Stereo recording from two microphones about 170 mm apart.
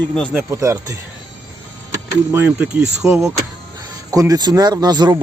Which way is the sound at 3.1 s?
20° right (ahead or behind).